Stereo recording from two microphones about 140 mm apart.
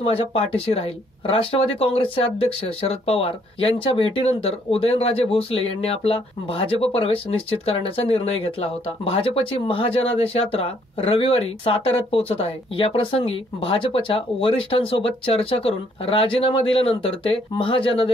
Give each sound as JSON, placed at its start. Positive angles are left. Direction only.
{"t": 0.0, "sound": "speech", "side_deg": 45}